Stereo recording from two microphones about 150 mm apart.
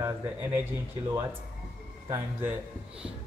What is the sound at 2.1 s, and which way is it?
Speech, 15° right (ahead or behind).